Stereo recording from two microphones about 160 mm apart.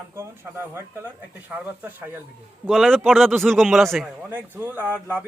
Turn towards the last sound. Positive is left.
turn(degrees=-10)  # may be behind; listen again after turning